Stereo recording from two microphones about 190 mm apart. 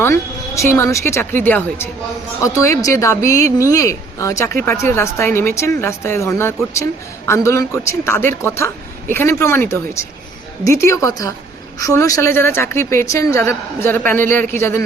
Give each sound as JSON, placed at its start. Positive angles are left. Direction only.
{"t": 0.0, "sound": "a woman's voice", "side_deg": 15}